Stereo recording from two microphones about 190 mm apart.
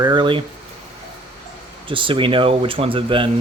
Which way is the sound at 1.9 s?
25° right (ahead or behind).